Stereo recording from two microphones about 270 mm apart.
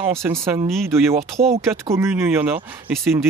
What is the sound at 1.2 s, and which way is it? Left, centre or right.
Speech, right.